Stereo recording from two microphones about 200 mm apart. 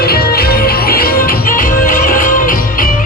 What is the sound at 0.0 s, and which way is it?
Music, 50° left (ahead or behind).